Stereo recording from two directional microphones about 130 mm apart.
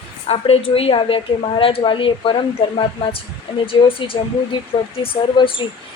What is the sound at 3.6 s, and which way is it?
A woman's voice, 45° left (ahead or behind).